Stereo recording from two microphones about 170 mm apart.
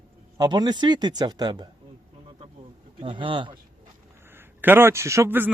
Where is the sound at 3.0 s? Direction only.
30° right (ahead or behind).